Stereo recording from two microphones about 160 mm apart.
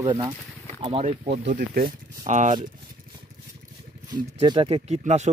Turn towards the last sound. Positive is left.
turn(degrees=-45)  # may be behind; listen again after turning